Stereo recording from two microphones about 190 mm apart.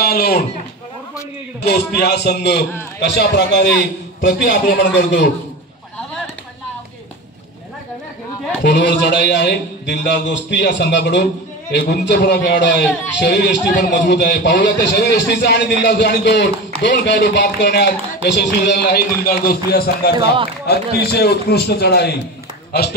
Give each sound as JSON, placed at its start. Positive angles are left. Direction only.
{"t": 0.0, "sound": "a sound", "side_deg": 55}
{"t": 1.6, "sound": "a man's voice", "side_deg": 60}
{"t": 4.2, "sound": "a man's voice", "side_deg": 55}
{"t": 8.6, "sound": "a man's voice", "side_deg": 65}